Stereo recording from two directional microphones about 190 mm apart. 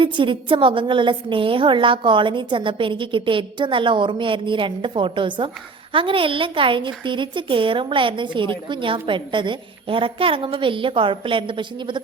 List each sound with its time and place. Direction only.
0.0 s a woman's voice: 25° right (ahead or behind)